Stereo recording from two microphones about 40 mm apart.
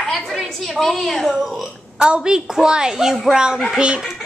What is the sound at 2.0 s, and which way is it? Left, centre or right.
A woman's voice, right.